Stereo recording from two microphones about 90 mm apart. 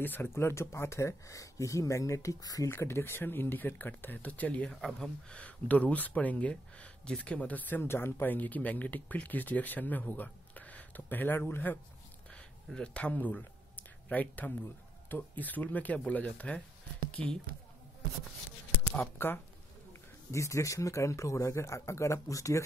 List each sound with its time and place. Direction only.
0.0 s speech: 25° left (ahead or behind); by 2.7 s 40° left (ahead or behind)
2.7 s speech: 25° left (ahead or behind)
12.6 s speech: 10° left (ahead or behind)
18.9 s speech: 25° left (ahead or behind)
19.9 s speech: 35° left (ahead or behind)